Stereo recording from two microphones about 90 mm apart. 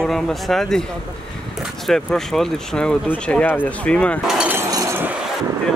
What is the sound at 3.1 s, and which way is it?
Speech, 15° left (ahead or behind).